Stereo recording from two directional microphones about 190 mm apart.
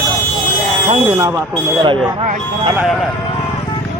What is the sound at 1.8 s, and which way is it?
Speech, 30° right (ahead or behind).